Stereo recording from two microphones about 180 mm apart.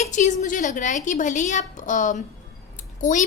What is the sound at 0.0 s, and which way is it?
A woman's voice, 40° left (ahead or behind).